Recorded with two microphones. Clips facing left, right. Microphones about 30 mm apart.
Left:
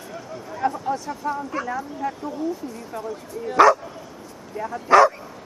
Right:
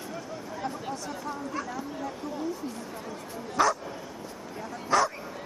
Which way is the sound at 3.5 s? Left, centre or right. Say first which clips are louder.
Left 10 dB; left.